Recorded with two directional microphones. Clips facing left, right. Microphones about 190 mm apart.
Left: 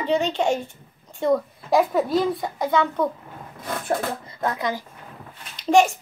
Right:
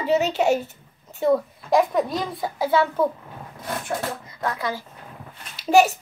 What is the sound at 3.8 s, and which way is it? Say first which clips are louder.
Speech: left 6 dB; 30° left (ahead or behind).